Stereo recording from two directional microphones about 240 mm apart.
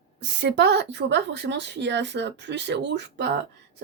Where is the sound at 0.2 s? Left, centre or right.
Right.